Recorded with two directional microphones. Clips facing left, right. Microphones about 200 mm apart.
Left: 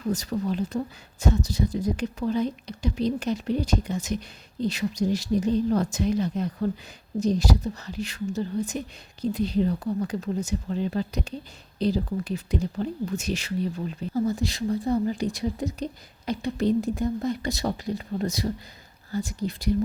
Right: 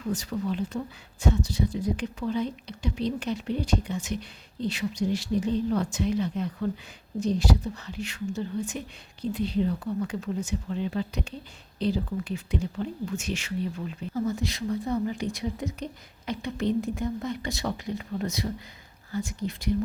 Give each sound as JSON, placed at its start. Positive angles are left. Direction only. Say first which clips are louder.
{"t": 0.0, "sound": "speech", "louder": "left 3 dB", "side_deg": 40}